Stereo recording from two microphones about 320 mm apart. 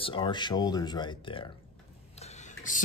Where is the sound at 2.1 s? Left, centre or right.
Centre.